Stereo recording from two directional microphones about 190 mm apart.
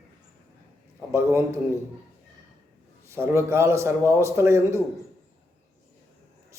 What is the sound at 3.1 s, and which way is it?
A man's voice, 15° right (ahead or behind).